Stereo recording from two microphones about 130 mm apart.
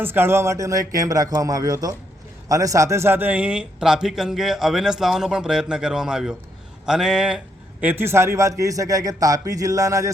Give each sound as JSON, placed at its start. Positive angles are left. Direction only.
{"t": 0.0, "sound": "a man's voice", "side_deg": -15}